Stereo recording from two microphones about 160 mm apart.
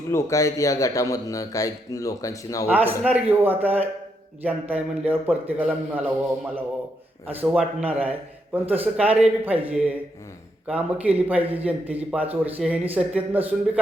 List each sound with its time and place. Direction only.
0.1 s speech: 15° left (ahead or behind)
2.6 s speech: 10° right (ahead or behind)